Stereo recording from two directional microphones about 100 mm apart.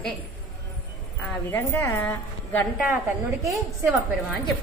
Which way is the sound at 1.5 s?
20° left (ahead or behind).